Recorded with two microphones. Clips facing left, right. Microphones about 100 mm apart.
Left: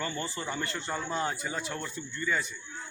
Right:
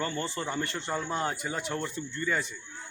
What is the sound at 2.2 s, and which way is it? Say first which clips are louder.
Speech: right 1 dB; 40° right (ahead or behind).